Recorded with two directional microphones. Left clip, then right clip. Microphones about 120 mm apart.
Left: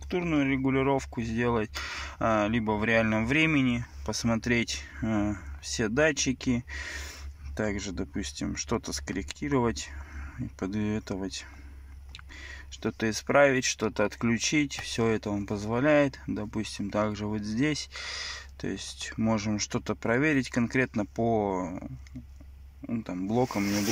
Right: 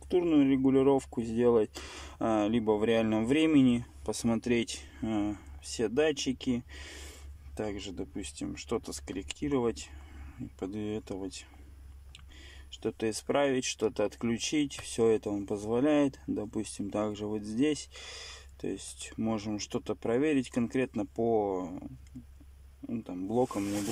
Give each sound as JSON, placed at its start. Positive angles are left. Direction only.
{"t": 0.1, "sound": "speech", "side_deg": -30}
{"t": 12.4, "sound": "speech", "side_deg": -10}
{"t": 22.8, "sound": "speech", "side_deg": -20}